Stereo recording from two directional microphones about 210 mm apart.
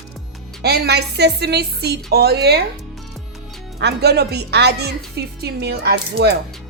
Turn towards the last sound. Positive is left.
turn(degrees=-50)  # may be behind; listen again after turning